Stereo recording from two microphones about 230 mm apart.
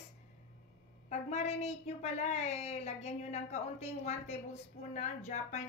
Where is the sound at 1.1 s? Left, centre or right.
Left.